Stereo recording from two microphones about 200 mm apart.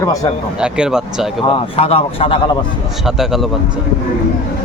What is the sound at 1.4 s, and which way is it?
Speech, 25° left (ahead or behind).